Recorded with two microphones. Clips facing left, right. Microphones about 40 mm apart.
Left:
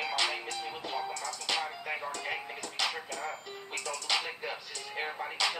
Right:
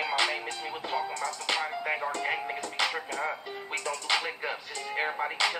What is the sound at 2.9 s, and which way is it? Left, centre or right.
Speech, right.